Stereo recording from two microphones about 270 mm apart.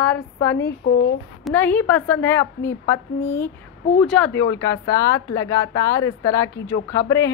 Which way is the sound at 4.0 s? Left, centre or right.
Centre.